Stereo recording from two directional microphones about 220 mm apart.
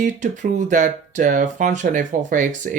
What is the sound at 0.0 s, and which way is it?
Speech, 35° right (ahead or behind).